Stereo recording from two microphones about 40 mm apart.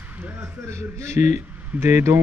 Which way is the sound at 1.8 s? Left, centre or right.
Right.